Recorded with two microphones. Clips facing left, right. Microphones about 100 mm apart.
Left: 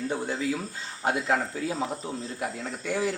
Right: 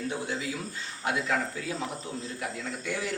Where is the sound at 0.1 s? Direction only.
50° left (ahead or behind).